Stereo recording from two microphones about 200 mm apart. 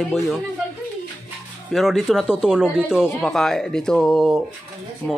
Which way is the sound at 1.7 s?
Centre (ahead or behind).